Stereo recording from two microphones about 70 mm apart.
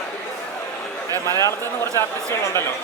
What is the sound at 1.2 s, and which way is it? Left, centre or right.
Speech, left.